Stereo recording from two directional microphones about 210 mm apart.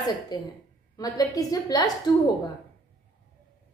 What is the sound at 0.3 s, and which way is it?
A woman's voice, 20° left (ahead or behind).